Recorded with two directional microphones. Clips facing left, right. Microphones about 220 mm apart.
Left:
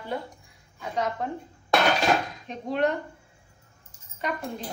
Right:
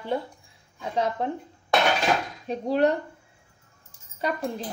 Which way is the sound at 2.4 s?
35° right (ahead or behind).